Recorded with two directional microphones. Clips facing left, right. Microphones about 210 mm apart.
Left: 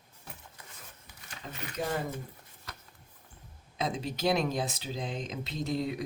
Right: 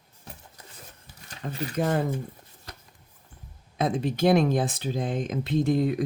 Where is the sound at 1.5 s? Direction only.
35° right (ahead or behind).